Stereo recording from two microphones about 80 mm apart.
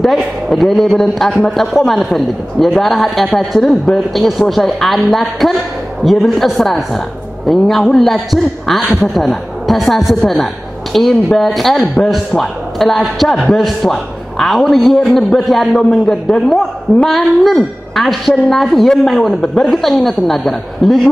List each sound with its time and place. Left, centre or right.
0.0 s a man's voice: centre